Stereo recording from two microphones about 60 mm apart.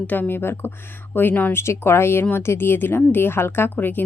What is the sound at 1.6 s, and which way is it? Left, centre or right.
Speech, left.